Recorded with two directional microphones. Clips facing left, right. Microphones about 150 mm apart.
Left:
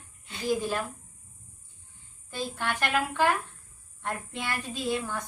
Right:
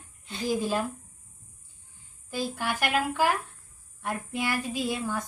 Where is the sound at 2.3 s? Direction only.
5° right (ahead or behind).